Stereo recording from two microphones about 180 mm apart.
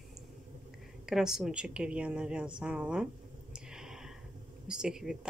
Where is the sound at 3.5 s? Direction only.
5° right (ahead or behind).